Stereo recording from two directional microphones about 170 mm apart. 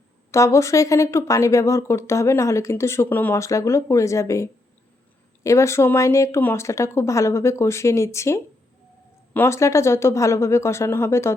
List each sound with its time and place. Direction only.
0.3 s speech: 20° left (ahead or behind)